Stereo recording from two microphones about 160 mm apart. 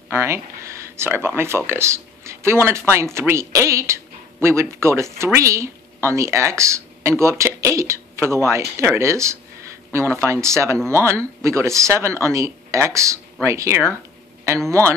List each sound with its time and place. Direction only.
0.1 s speech: 15° right (ahead or behind)